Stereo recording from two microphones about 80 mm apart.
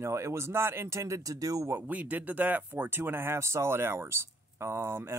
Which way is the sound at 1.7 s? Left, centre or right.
Centre.